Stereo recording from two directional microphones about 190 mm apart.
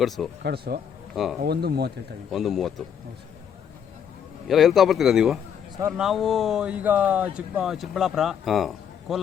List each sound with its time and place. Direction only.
0.4 s speech: 55° right (ahead or behind)
1.1 s speech: centre (ahead or behind)
1.4 s speech: 55° right (ahead or behind)
2.3 s speech: centre (ahead or behind)
4.4 s speech: centre (ahead or behind)